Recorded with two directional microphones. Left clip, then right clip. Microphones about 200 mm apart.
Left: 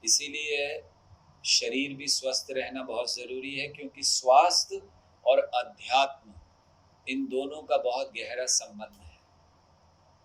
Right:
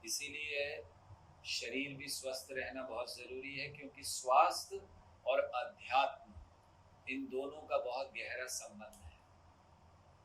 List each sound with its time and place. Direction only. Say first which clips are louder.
0.0 s speech: left 14 dB; 40° left (ahead or behind)